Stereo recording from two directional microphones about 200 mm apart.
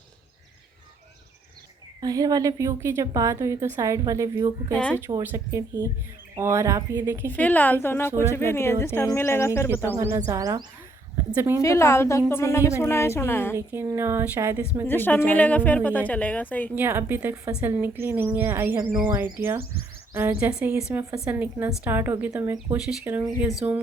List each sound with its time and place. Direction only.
2.0 s a woman's voice: 20° right (ahead or behind)
7.3 s a woman's voice: 10° left (ahead or behind)
9.9 s a woman's voice: 15° right (ahead or behind)
11.6 s a woman's voice: 15° left (ahead or behind)
13.5 s a woman's voice: 10° right (ahead or behind)
14.8 s a woman's voice: 10° left (ahead or behind)
16.7 s a woman's voice: 10° right (ahead or behind)